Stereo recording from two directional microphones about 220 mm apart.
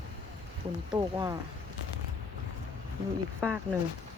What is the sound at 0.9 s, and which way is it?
Speech, 15° right (ahead or behind).